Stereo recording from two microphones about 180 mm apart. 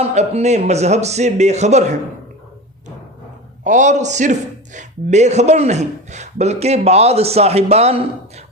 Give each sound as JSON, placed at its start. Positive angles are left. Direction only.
{"t": 0.0, "sound": "a man's voice", "side_deg": -40}
{"t": 3.6, "sound": "a man's voice", "side_deg": -40}